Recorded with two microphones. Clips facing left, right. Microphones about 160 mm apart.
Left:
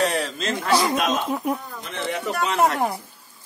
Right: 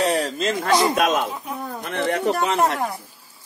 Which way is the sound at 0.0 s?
35° right (ahead or behind).